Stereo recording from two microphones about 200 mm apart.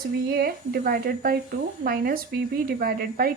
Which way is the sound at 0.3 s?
50° right (ahead or behind).